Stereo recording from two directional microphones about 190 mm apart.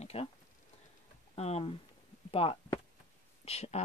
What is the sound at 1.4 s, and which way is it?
A woman's voice, 35° left (ahead or behind).